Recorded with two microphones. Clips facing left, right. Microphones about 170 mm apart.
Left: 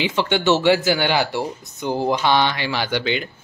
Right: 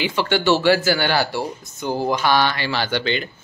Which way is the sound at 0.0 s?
20° left (ahead or behind).